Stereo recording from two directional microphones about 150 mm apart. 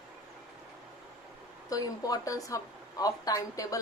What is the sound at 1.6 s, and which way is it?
A woman's voice, 25° left (ahead or behind).